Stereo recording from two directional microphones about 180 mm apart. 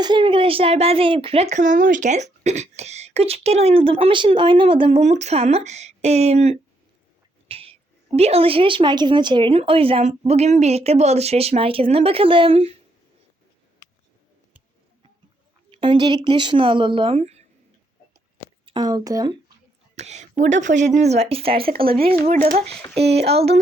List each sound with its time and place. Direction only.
0.0 s speech: 25° right (ahead or behind)
15.7 s speech: 25° right (ahead or behind)
18.6 s speech: 25° right (ahead or behind)
20.0 s speech: 40° right (ahead or behind)
21.7 s speech: 55° right (ahead or behind)